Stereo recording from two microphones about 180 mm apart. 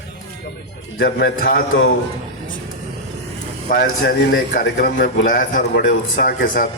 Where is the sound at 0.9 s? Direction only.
90° left.